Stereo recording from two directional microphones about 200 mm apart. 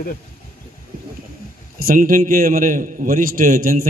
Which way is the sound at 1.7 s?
45° right (ahead or behind).